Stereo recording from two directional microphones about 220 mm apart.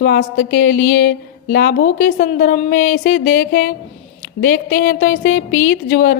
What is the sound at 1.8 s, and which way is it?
A woman's voice, 35° left (ahead or behind).